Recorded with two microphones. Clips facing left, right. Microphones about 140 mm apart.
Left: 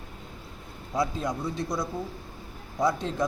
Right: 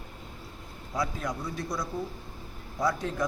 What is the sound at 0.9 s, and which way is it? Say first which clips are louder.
Speech: left 4 dB; 25° left (ahead or behind).